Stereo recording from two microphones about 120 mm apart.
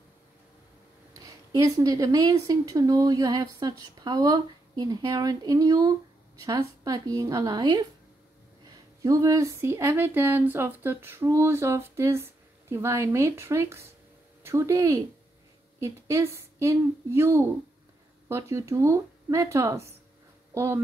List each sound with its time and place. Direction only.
1.1 s speech: 30° right (ahead or behind)